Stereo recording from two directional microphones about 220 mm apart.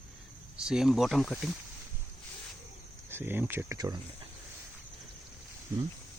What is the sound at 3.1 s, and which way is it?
Speech, 10° right (ahead or behind).